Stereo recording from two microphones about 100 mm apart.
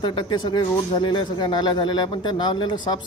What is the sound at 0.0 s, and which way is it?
Speech, 50° left (ahead or behind).